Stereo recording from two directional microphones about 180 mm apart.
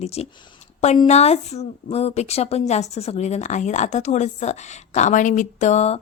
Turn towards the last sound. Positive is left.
turn(degrees=40)  # may be behind; listen again after turning